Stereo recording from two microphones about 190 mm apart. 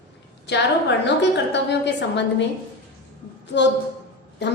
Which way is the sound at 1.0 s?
65° left (ahead or behind).